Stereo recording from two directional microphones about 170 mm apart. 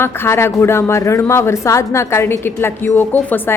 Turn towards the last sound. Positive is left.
turn(degrees=10)  # may be behind; listen again after turning